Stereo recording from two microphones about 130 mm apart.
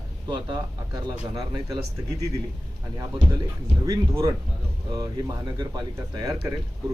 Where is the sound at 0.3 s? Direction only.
35° right (ahead or behind).